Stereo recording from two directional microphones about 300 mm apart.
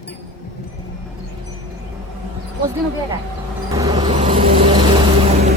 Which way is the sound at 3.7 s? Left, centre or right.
Centre.